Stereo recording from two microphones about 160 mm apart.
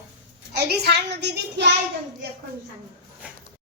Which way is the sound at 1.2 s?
90° right.